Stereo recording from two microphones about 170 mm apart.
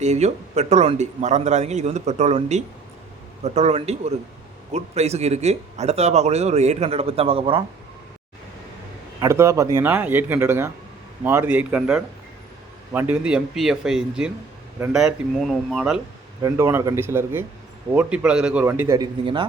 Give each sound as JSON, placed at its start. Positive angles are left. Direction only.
{"t": 0.0, "sound": "speech", "side_deg": -40}
{"t": 9.2, "sound": "a man's voice", "side_deg": -15}
{"t": 16.4, "sound": "a man's voice", "side_deg": -15}
{"t": 18.9, "sound": "a man's voice", "side_deg": -25}